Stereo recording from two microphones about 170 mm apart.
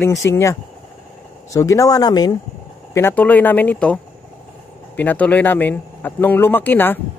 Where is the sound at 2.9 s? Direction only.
10° left (ahead or behind).